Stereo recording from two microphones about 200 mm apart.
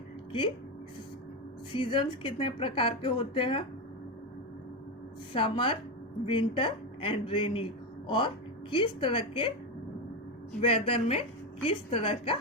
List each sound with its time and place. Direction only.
1.8 s a woman's voice: 25° left (ahead or behind)
5.3 s a woman's voice: 25° left (ahead or behind)
10.6 s a woman's voice: 30° left (ahead or behind)